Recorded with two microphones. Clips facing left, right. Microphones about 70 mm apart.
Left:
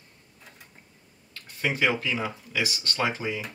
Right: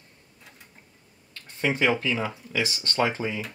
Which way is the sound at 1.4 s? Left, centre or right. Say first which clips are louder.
Right 2 dB; right.